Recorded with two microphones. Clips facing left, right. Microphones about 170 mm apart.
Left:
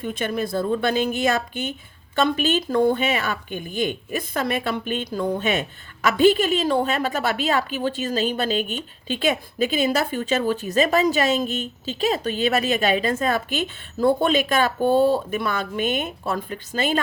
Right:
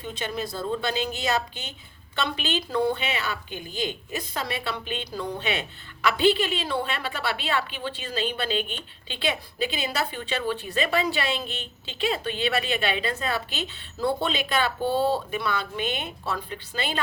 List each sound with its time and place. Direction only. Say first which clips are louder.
0.0 s speech: left 6 dB; 55° left (ahead or behind)